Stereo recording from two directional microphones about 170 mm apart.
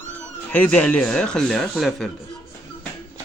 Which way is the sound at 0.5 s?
10° left (ahead or behind).